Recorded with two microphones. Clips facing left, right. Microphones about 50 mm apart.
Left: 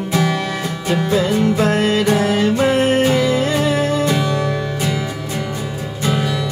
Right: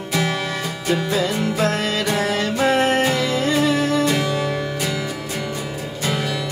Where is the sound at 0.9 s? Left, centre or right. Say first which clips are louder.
Left 3 dB; left.